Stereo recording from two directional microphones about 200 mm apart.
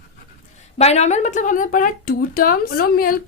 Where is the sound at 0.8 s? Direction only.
35° left (ahead or behind).